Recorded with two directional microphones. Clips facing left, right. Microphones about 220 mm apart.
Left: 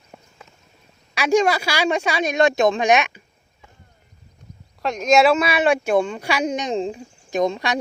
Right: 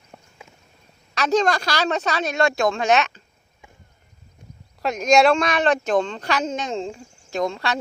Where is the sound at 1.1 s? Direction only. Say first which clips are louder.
Left 2 dB; 10° left (ahead or behind).